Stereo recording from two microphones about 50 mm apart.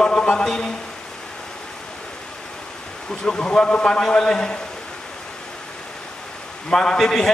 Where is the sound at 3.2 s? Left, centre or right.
Centre.